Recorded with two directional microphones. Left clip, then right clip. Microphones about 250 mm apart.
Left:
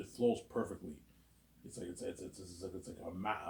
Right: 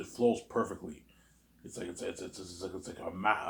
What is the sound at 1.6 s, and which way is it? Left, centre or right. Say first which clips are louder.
Speech: right 5 dB; centre.